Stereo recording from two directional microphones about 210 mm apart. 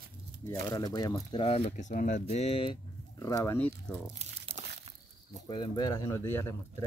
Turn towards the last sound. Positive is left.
turn(degrees=10)  # may be behind; listen again after turning